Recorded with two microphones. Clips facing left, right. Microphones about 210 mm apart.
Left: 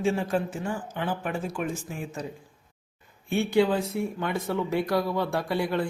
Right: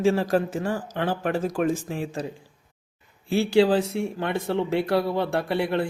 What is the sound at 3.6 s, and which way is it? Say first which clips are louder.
Speech: right 4 dB; 30° right (ahead or behind).